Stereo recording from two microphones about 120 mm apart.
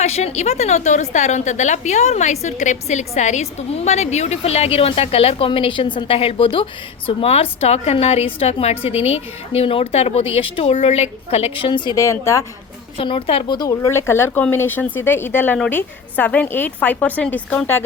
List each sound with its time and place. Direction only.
0.0 s a woman's voice: 65° left (ahead or behind); by 11.9 s 45° left (ahead or behind)
11.9 s speech: 25° left (ahead or behind)
13.0 s a woman's voice: 50° left (ahead or behind)
13.6 s a woman's voice: 25° left (ahead or behind)